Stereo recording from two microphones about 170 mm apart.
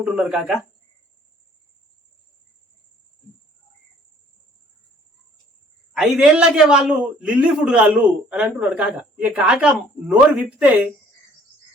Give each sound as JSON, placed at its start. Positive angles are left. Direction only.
{"t": 0.0, "sound": "a man's voice", "side_deg": -5}
{"t": 5.9, "sound": "a man's voice", "side_deg": 0}